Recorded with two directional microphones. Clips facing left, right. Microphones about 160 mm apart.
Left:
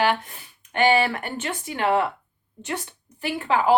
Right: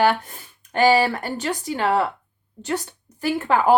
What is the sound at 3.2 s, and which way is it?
Speech, 50° right (ahead or behind).